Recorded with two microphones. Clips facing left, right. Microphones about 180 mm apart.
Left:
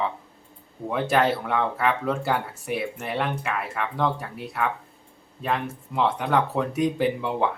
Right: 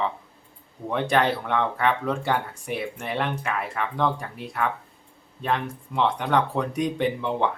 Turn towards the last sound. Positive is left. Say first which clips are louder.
# even
turn(degrees=5)  # may be behind; listen again after turning